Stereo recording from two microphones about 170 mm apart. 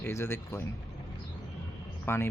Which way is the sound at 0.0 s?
15° left (ahead or behind).